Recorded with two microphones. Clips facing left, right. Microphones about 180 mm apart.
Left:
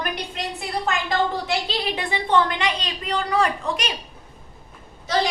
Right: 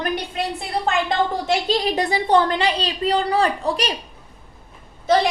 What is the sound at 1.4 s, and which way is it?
A woman's voice, 45° right (ahead or behind).